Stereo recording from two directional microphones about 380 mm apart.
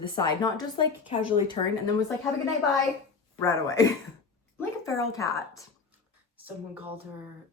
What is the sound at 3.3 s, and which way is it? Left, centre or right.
Speech, centre.